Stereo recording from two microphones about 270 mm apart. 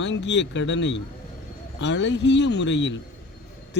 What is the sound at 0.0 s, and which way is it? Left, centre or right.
A man's voice, left.